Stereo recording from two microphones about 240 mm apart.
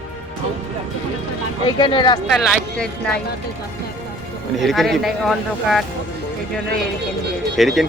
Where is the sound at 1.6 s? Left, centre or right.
Centre.